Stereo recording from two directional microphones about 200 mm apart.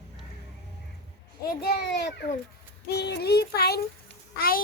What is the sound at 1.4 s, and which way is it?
A child's voice, 50° left (ahead or behind).